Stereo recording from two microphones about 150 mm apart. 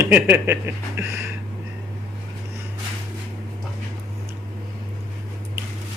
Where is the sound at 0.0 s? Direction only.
15° right (ahead or behind).